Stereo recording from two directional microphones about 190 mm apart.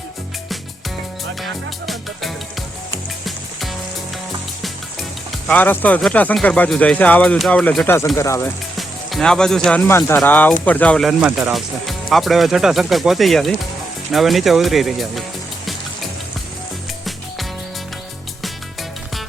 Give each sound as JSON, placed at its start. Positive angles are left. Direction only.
{"t": 3.2, "sound": "music", "side_deg": 0}
{"t": 5.5, "sound": "speech", "side_deg": 10}
{"t": 8.8, "sound": "speech", "side_deg": 0}
{"t": 18.4, "sound": "music", "side_deg": 0}